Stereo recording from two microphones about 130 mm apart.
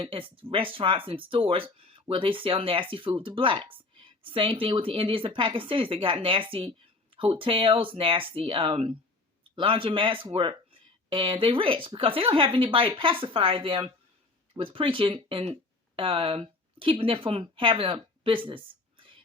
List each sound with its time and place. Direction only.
0.0 s a woman's voice: 45° right (ahead or behind)